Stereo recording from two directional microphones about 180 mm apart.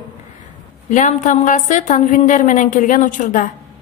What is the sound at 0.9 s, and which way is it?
A woman's voice, 45° left (ahead or behind).